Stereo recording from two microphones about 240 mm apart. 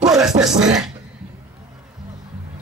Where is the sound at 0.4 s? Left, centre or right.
Centre.